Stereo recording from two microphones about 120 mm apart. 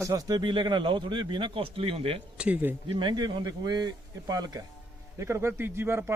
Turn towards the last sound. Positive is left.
turn(degrees=-20)  # may be behind; listen again after turning